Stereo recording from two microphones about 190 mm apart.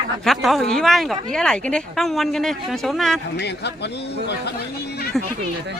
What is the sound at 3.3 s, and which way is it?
Speech, 60° left (ahead or behind).